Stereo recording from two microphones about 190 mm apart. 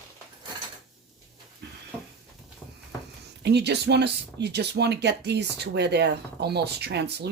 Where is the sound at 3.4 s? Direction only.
60° right (ahead or behind).